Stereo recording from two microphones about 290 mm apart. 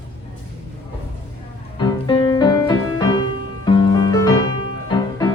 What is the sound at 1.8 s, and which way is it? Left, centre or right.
Music, centre.